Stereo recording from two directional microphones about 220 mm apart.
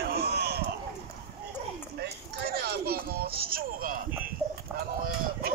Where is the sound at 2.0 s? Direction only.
45° right (ahead or behind).